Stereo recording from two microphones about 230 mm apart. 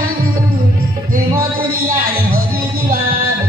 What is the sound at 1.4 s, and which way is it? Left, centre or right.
Music, right.